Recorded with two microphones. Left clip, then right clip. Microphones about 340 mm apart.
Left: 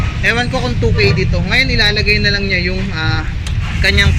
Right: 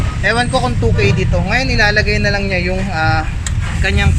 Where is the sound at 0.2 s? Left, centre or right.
Centre.